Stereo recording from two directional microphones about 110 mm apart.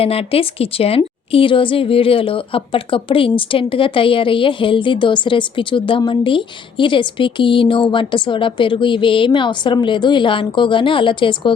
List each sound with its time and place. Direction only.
0.0 s a woman's voice: 60° left (ahead or behind)